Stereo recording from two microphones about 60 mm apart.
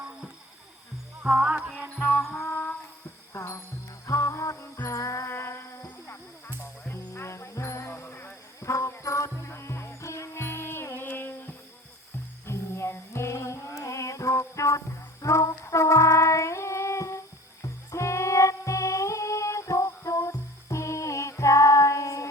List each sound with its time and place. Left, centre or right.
1.2 s music: centre
2.0 s music: left
3.3 s music: left
5.3 s music: left
7.9 s music: left
8.6 s music: left
12.5 s music: left